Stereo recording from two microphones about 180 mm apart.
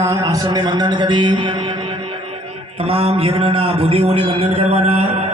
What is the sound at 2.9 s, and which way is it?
A man's voice, 35° right (ahead or behind).